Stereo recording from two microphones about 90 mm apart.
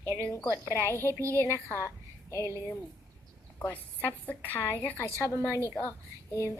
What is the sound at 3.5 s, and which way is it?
Speech, 20° left (ahead or behind).